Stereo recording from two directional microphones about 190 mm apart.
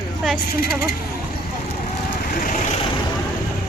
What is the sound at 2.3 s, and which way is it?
Vehicle, 45° left (ahead or behind).